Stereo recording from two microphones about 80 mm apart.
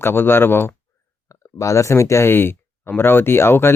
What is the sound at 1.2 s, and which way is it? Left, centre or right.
Speech, left.